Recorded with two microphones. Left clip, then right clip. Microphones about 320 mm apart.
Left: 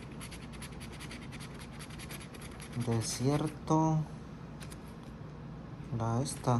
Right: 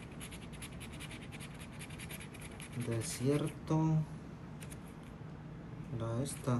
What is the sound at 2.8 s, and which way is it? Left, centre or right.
A man's voice, centre.